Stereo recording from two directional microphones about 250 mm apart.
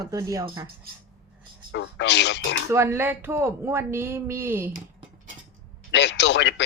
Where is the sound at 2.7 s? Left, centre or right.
Centre.